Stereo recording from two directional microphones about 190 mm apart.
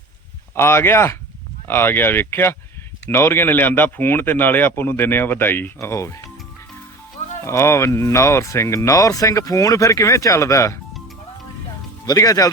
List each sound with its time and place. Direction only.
0.5 s speech: 15° left (ahead or behind)
7.4 s speech: 15° left (ahead or behind)
12.0 s speech: 20° left (ahead or behind)